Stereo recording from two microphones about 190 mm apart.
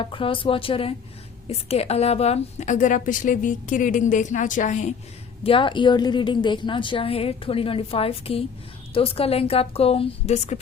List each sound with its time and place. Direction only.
0.0 s a woman's voice: 30° left (ahead or behind)
5.4 s a woman's voice: 30° left (ahead or behind)